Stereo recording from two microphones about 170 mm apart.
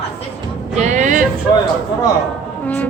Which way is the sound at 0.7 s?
45° right (ahead or behind).